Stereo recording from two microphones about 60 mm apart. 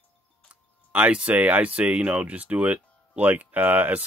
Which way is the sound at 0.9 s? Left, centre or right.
Right.